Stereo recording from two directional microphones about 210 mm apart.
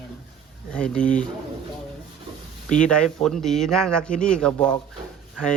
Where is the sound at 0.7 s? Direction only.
5° left (ahead or behind).